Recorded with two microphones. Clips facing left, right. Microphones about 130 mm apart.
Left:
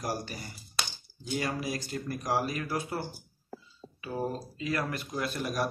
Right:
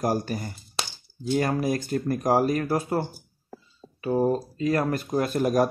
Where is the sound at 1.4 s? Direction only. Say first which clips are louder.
Right 8 dB; 50° right (ahead or behind).